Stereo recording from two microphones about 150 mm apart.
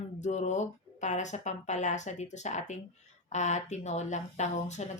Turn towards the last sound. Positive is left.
turn(degrees=50)  # may be behind; listen again after turning